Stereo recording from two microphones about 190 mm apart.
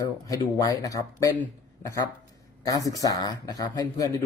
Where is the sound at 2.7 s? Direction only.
20° left (ahead or behind).